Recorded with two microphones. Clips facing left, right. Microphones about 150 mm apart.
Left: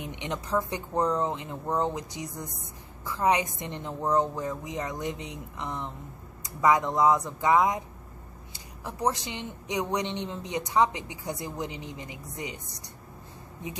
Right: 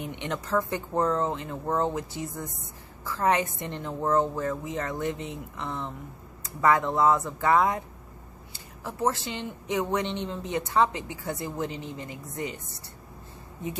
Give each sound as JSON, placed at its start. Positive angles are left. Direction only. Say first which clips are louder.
{"t": 0.0, "sound": "speech", "louder": "right 2 dB", "side_deg": 15}